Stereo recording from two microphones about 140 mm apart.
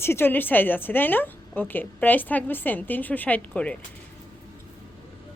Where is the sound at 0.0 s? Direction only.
15° left (ahead or behind).